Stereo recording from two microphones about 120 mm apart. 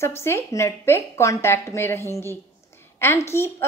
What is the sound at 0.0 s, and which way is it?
A woman's voice, 20° left (ahead or behind).